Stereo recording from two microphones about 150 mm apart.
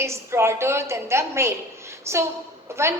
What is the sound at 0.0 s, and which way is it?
A woman's voice, 20° right (ahead or behind).